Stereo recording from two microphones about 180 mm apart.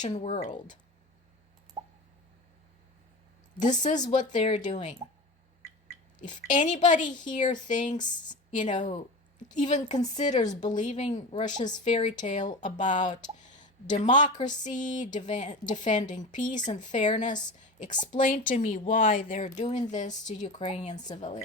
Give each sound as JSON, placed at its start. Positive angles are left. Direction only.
{"t": 0.0, "sound": "a woman's voice", "side_deg": 40}
{"t": 3.6, "sound": "speech", "side_deg": 45}
{"t": 6.1, "sound": "a woman's voice", "side_deg": 45}